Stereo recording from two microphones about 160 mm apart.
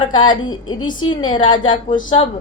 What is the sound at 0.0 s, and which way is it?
A woman's voice, 30° left (ahead or behind).